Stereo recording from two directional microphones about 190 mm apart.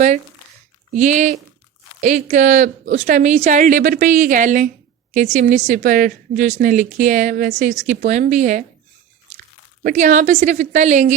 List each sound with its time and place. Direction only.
0.9 s a woman's voice: 40° right (ahead or behind)
9.8 s a woman's voice: 40° right (ahead or behind)